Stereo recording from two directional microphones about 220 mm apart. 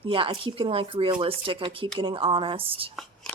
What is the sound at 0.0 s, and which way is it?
A woman's voice, 25° right (ahead or behind).